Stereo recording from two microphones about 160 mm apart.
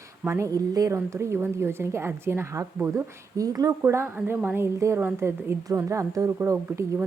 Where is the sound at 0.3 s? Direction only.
20° right (ahead or behind).